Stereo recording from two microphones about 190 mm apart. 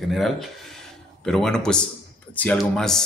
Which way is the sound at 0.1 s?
Centre (ahead or behind).